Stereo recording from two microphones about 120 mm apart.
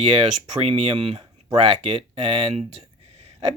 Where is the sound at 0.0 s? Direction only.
45° right (ahead or behind).